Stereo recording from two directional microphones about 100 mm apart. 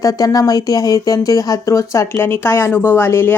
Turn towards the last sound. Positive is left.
turn(degrees=25)  # may be behind; listen again after turning